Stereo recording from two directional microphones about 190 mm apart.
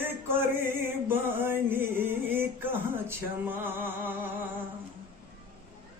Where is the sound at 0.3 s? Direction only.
10° right (ahead or behind).